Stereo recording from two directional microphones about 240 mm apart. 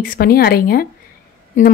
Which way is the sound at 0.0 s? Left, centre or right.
Left.